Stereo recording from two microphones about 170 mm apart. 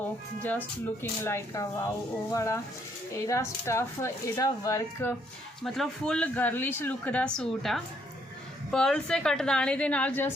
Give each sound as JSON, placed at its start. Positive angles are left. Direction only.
{"t": 1.2, "sound": "speech", "side_deg": 15}
{"t": 5.6, "sound": "a woman's voice", "side_deg": 0}